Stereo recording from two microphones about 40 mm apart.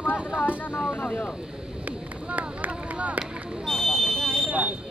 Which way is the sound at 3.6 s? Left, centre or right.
Centre.